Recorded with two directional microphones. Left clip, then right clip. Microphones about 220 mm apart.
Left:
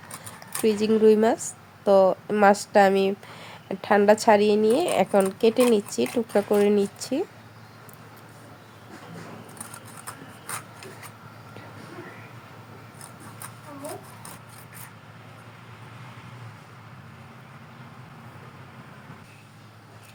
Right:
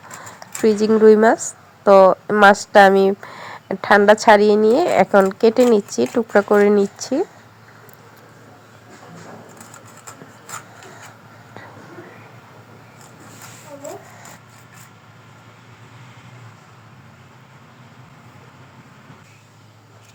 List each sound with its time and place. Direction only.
0.6 s a woman's voice: 20° right (ahead or behind)